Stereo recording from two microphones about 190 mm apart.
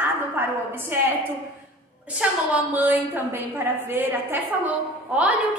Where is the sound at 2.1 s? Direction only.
10° right (ahead or behind).